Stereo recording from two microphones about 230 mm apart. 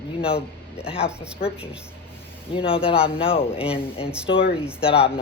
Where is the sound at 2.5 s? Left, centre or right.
Left.